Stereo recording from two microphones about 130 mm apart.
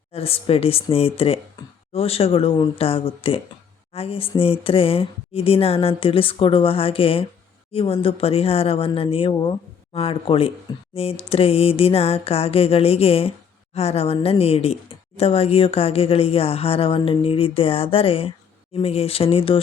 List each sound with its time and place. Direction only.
0.1 s speech: 50° left (ahead or behind)